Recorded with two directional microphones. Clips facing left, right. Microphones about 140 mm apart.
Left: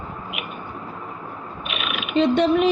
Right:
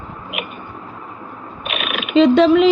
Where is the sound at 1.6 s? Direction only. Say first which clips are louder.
Right 5 dB; 75° right (ahead or behind).